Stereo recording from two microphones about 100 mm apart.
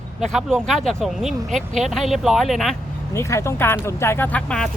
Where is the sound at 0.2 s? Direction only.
Centre (ahead or behind).